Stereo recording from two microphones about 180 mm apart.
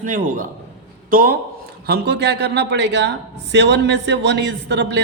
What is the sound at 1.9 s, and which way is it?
A man's voice, 70° right (ahead or behind).